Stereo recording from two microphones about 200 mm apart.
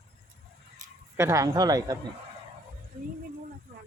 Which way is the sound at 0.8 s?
40° right (ahead or behind).